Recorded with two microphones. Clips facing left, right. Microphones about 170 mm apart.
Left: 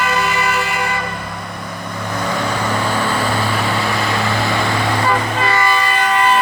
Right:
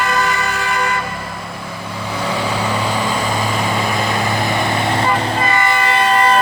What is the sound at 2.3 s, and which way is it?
Vehicle, 15° right (ahead or behind).